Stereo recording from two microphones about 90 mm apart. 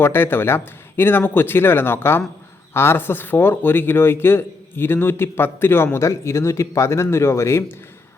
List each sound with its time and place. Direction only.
0.0 s speech: 25° left (ahead or behind)